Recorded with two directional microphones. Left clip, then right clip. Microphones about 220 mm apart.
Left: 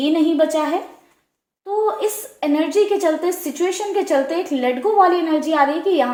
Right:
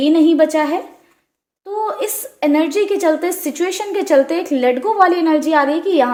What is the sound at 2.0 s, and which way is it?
A woman's voice, 50° right (ahead or behind).